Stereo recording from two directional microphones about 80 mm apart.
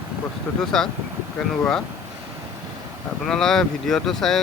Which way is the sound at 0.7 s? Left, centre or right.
Centre.